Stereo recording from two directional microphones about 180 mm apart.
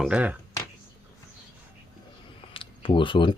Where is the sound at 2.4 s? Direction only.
30° left (ahead or behind).